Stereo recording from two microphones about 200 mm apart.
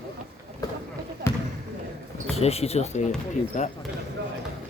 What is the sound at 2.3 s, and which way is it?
Speech, 30° left (ahead or behind).